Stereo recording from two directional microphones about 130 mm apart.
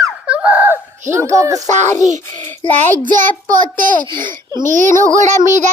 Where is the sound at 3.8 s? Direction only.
90° right.